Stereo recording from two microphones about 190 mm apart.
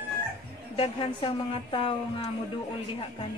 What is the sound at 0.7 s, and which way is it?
A woman's voice, 30° left (ahead or behind).